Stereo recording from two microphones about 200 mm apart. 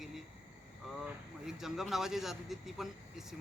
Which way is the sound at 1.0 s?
Centre (ahead or behind).